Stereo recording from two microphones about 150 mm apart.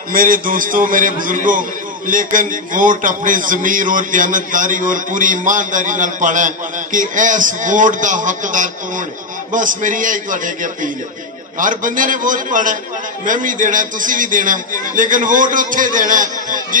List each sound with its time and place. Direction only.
0.1 s a man's voice: 70° right (ahead or behind)